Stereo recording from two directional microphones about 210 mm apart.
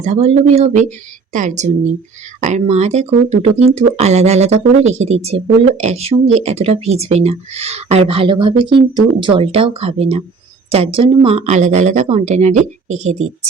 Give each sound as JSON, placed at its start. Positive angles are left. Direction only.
{"t": 0.0, "sound": "speech", "side_deg": -35}